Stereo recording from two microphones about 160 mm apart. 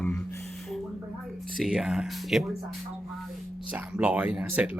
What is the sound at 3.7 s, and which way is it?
Speech, 10° right (ahead or behind).